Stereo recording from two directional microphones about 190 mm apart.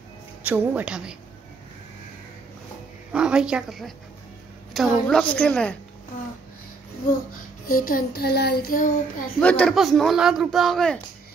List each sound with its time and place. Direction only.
0.4 s speech: 10° right (ahead or behind)
3.1 s a woman's voice: 5° right (ahead or behind)
7.6 s a sound: 50° left (ahead or behind)
9.4 s speech: 5° left (ahead or behind)